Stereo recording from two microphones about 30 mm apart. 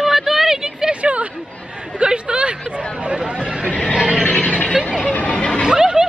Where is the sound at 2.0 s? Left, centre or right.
Right.